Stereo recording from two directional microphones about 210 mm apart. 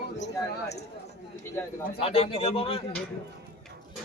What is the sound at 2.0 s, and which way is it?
Speech, 30° left (ahead or behind).